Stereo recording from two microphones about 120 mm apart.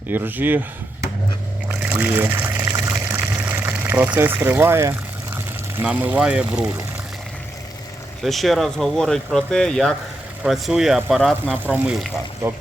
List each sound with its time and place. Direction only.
0.1 s speech: 15° right (ahead or behind)
1.8 s water: 15° right (ahead or behind)
8.2 s speech: centre (ahead or behind)
11.5 s speech: 10° right (ahead or behind)